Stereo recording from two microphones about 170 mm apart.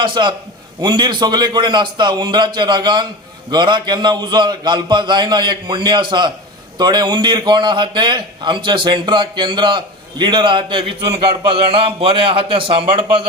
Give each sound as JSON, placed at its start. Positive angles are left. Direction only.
{"t": 0.0, "sound": "a man's voice", "side_deg": -30}